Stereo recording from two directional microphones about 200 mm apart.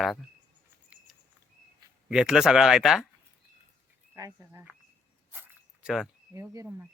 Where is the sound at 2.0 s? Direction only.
5° right (ahead or behind).